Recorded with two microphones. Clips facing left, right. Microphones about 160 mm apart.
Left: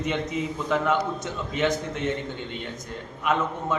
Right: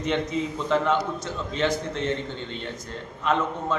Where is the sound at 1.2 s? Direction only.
20° left (ahead or behind).